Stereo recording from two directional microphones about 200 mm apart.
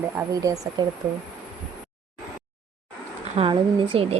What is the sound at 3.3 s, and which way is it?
Speech, 25° right (ahead or behind).